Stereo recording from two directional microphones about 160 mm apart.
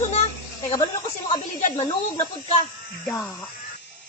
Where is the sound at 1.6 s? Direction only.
50° left (ahead or behind).